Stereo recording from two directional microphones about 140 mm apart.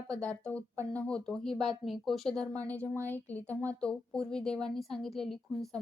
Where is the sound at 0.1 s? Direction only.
10° left (ahead or behind).